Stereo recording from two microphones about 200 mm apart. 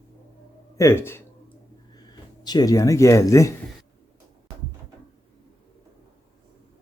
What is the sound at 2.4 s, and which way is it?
Speech, 20° left (ahead or behind).